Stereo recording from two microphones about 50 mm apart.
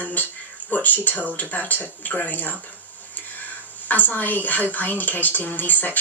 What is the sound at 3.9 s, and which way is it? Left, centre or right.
Speech, left.